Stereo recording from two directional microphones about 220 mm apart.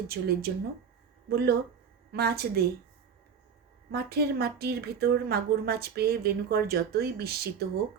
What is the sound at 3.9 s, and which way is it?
A woman's voice, 45° right (ahead or behind).